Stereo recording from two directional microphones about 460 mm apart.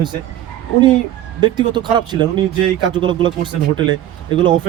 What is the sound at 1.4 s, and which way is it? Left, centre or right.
A man's voice, centre.